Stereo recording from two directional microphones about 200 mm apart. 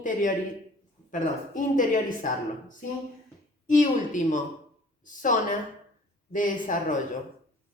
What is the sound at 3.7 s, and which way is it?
A woman's voice, 40° left (ahead or behind).